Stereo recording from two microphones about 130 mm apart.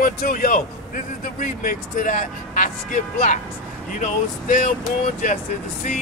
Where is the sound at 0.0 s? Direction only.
90° left.